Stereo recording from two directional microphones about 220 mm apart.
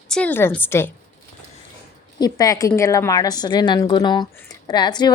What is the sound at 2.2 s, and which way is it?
Speech, 15° left (ahead or behind).